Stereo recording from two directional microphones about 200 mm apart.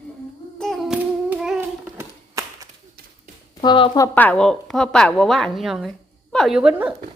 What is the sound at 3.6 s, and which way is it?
Speech, 20° left (ahead or behind).